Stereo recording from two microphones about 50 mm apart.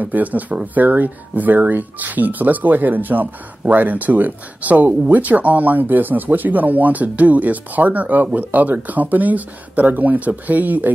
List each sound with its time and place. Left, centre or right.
0.0 s speech: right